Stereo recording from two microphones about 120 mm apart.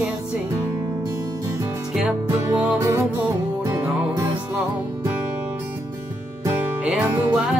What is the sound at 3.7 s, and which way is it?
Music, 30° right (ahead or behind).